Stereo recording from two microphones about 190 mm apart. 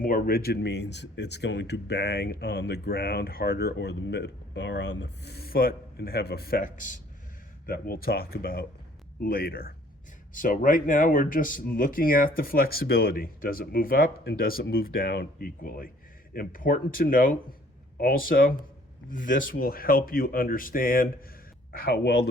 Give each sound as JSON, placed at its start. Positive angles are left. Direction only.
{"t": 0.0, "sound": "speech", "side_deg": 50}